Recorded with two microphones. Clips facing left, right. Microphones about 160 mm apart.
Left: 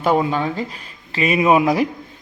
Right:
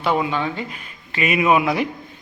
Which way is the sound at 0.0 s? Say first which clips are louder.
Left 3 dB; 40° left (ahead or behind).